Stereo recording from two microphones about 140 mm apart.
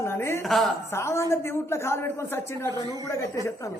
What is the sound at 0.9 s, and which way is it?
A woman's voice, 20° left (ahead or behind).